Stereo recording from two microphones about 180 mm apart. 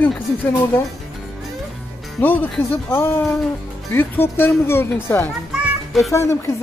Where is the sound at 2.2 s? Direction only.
10° left (ahead or behind).